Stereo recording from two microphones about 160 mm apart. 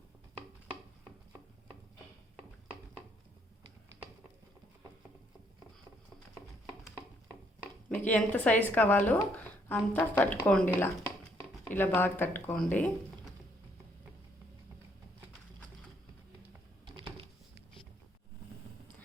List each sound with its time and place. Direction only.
7.9 s speech: 10° left (ahead or behind)
16.8 s typing: 30° right (ahead or behind)